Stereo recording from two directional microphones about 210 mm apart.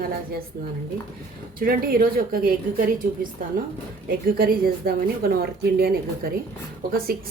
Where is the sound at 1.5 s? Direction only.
45° right (ahead or behind).